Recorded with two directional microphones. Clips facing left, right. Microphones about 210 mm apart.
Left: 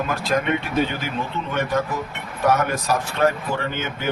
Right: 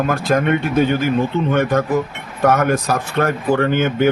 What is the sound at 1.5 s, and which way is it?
A man's voice, 50° right (ahead or behind).